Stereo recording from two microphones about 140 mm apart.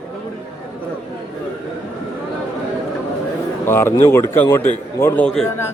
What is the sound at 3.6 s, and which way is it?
Speech, 15° left (ahead or behind).